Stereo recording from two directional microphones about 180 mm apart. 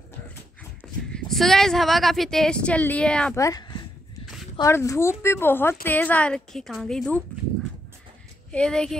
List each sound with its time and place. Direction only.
1.1 s a woman's voice: centre (ahead or behind)
3.3 s a woman's voice: 20° left (ahead or behind); by 7.2 s 5° left (ahead or behind)
8.5 s speech: 5° left (ahead or behind)